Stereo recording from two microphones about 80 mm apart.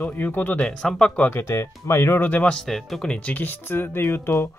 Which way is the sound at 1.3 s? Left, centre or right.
Left.